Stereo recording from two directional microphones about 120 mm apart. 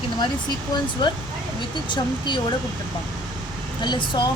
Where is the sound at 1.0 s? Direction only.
40° left (ahead or behind).